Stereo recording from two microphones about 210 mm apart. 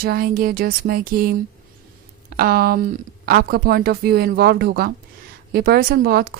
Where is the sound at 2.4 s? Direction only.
45° right (ahead or behind).